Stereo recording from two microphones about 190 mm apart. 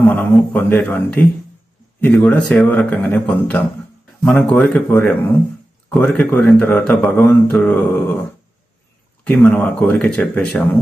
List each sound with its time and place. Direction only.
0.1 s speech: 10° left (ahead or behind)
9.2 s speech: 10° left (ahead or behind)